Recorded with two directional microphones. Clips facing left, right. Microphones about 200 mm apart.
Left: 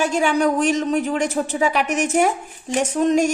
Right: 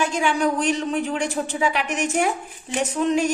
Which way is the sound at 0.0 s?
40° left (ahead or behind).